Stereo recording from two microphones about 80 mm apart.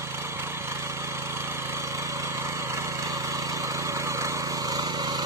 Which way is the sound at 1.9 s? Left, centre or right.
Right.